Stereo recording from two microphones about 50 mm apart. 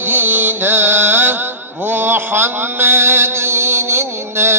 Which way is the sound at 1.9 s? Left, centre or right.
Right.